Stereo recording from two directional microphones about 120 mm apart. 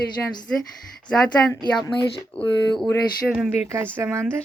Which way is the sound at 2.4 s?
5° left (ahead or behind).